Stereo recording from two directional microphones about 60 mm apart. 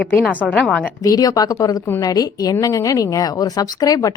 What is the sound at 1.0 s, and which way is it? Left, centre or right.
A woman's voice, left.